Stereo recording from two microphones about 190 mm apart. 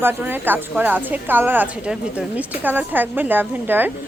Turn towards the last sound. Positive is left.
turn(degrees=-10)  # may be behind; listen again after turning